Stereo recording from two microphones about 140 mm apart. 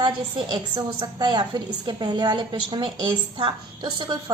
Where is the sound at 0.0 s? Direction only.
30° right (ahead or behind).